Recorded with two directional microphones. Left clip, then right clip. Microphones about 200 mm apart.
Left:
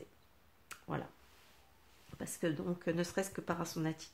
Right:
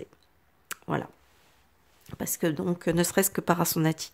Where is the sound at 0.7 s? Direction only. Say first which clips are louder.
Right 11 dB; 50° right (ahead or behind).